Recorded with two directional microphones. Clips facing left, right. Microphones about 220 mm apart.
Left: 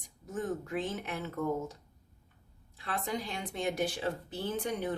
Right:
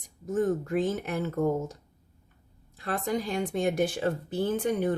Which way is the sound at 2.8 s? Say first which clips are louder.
Right 6 dB; 45° right (ahead or behind).